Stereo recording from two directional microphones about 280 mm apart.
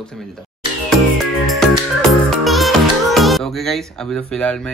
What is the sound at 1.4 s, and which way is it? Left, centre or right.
Music, centre.